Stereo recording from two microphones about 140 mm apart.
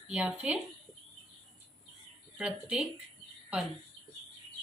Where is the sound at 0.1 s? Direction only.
10° right (ahead or behind).